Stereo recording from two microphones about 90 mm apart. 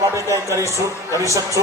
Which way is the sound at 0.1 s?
35° right (ahead or behind).